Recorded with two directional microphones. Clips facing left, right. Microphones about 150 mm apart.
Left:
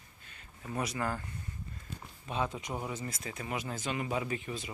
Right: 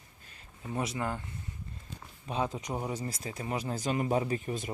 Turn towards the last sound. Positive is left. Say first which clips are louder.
# right 4 dB
turn(degrees=-45)  # may be behind; listen again after turning